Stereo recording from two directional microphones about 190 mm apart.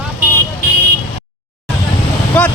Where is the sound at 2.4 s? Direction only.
5° left (ahead or behind).